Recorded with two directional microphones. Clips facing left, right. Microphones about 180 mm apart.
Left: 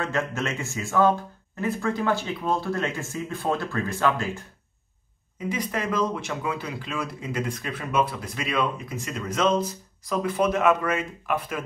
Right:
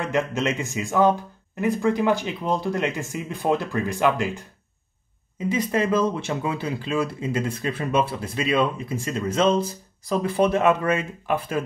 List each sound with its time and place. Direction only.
0.0 s speech: 15° right (ahead or behind)
5.5 s speech: 25° right (ahead or behind)